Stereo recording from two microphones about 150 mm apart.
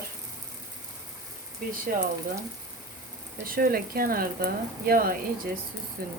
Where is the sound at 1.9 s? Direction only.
65° right (ahead or behind).